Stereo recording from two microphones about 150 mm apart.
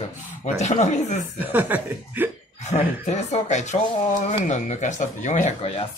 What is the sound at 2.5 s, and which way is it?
Speech, 50° left (ahead or behind).